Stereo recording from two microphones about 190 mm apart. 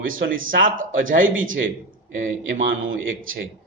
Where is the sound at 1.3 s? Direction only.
90° right.